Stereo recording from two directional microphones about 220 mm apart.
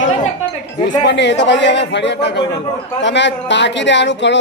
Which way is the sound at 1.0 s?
55° left (ahead or behind).